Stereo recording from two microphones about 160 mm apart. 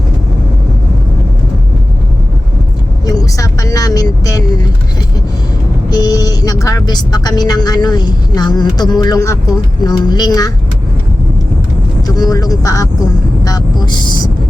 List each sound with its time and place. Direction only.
3.1 s vehicle: 20° left (ahead or behind)
5.9 s speech: 25° left (ahead or behind)
12.0 s speech: 25° left (ahead or behind)